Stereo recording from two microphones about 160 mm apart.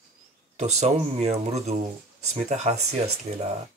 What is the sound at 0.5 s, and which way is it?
Speech, 45° right (ahead or behind).